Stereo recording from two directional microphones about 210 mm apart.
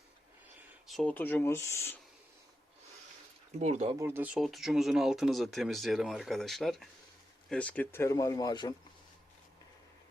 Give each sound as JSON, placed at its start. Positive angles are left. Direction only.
{"t": 0.9, "sound": "speech", "side_deg": 5}
{"t": 3.6, "sound": "speech", "side_deg": -30}
{"t": 3.9, "sound": "speech", "side_deg": -10}